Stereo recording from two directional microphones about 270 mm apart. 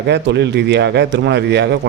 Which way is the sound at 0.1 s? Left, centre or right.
Right.